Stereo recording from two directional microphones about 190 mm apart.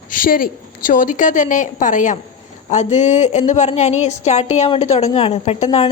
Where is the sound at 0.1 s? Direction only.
45° left (ahead or behind).